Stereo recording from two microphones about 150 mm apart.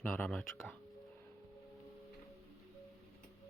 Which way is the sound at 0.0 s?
5° left (ahead or behind).